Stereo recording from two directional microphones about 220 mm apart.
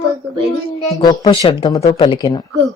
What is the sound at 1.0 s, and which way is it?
Speech, 20° left (ahead or behind).